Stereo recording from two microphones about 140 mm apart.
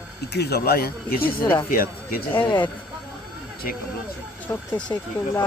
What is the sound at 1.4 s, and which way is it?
Speech, 15° left (ahead or behind).